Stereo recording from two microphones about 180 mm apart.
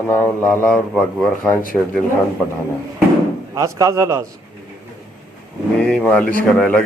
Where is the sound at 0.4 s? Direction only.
15° right (ahead or behind).